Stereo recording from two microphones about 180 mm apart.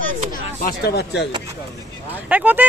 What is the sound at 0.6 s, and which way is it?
Speech, 65° left (ahead or behind).